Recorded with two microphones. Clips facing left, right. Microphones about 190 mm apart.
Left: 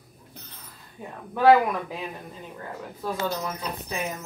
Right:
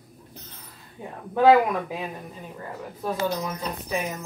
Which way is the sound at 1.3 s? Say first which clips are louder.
Right 1 dB; 15° right (ahead or behind).